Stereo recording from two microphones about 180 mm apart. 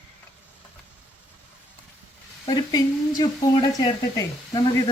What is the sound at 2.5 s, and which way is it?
Speech, 20° left (ahead or behind).